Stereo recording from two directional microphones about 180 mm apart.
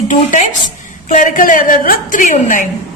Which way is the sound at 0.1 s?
45° left (ahead or behind).